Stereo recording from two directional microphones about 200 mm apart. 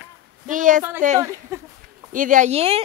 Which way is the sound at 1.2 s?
15° right (ahead or behind).